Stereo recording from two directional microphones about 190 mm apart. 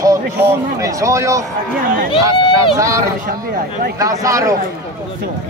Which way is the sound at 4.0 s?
15° right (ahead or behind).